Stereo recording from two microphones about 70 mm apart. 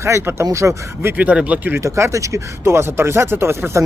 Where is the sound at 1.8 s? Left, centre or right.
Right.